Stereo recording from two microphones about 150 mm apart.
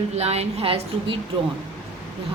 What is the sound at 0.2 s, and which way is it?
A man's voice, 45° right (ahead or behind).